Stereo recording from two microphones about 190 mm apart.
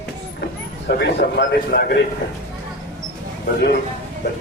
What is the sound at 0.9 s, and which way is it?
A man's voice, 60° left (ahead or behind).